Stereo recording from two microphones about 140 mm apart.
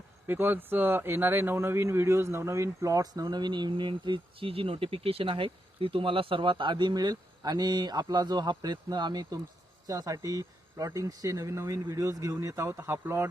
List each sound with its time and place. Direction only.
0.3 s a man's voice: 15° right (ahead or behind)